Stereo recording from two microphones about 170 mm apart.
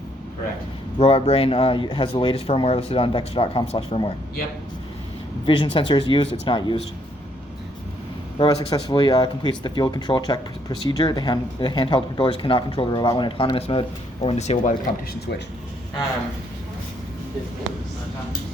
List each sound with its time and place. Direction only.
0.9 s speech: 35° left (ahead or behind)
5.5 s speech: 30° left (ahead or behind)
8.4 s speech: 25° left (ahead or behind); by 14.8 s 40° left (ahead or behind)